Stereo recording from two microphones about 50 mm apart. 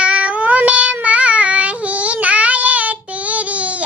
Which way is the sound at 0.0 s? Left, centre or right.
Right.